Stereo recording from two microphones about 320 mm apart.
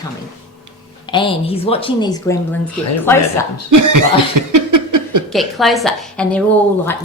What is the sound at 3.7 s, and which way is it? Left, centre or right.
Speech, right.